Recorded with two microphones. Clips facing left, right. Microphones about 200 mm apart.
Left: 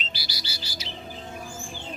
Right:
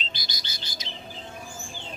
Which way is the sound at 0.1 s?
10° left (ahead or behind).